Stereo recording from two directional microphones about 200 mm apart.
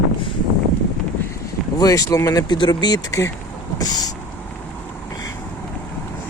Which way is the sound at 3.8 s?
20° left (ahead or behind).